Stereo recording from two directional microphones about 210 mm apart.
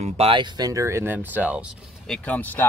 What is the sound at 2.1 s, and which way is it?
Speech, 5° left (ahead or behind).